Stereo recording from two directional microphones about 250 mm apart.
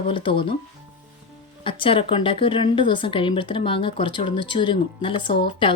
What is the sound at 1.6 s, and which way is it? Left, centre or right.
Speech, left.